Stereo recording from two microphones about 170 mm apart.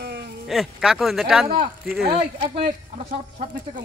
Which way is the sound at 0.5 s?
Centre (ahead or behind).